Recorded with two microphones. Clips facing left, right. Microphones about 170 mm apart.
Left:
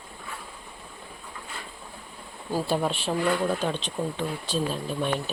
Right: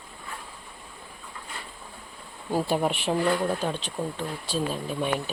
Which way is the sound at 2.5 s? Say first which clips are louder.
Right 1 dB; 25° right (ahead or behind).